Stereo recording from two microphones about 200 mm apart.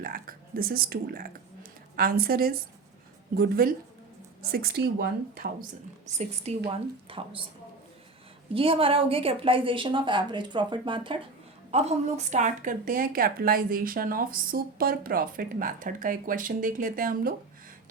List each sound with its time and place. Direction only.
0.0 s speech: 45° right (ahead or behind)
6.1 s a woman's voice: 35° right (ahead or behind)
8.5 s a woman's voice: 25° right (ahead or behind); by 17.3 s 45° right (ahead or behind)